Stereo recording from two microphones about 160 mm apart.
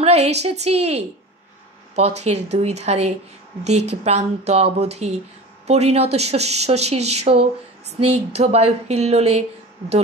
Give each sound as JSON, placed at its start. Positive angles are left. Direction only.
{"t": 0.0, "sound": "a woman's voice", "side_deg": -45}